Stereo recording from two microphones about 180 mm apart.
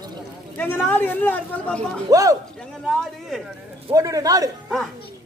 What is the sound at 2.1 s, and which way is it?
Speech, 20° right (ahead or behind).